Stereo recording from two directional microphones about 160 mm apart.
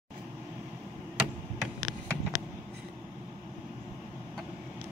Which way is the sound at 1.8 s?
25° left (ahead or behind).